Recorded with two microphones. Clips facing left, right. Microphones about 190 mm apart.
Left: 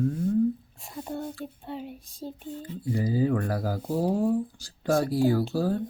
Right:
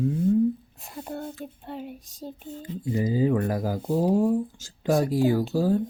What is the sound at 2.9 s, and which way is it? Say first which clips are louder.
Speech: right 2 dB; 20° right (ahead or behind).